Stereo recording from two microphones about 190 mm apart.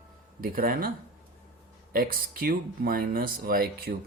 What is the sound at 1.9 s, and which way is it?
Speech, 50° right (ahead or behind).